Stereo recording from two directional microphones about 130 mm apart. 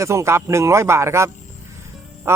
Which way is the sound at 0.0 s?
20° right (ahead or behind).